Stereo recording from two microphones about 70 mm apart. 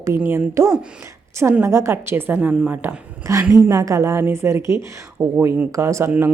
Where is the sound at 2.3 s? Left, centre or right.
Centre.